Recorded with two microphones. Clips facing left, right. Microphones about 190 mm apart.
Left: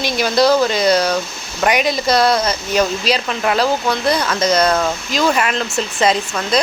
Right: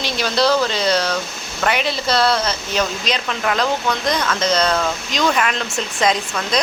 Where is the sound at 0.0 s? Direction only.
10° left (ahead or behind).